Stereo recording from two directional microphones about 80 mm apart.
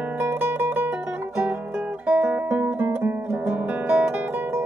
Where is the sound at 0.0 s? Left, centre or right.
Right.